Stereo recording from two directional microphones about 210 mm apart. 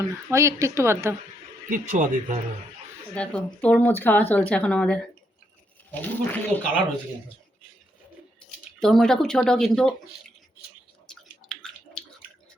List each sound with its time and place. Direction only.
0.0 s a woman's voice: 15° right (ahead or behind)
1.7 s speech: 40° right (ahead or behind)
3.2 s speech: 5° left (ahead or behind)
8.8 s speech: centre (ahead or behind)
11.1 s a sound: 5° left (ahead or behind)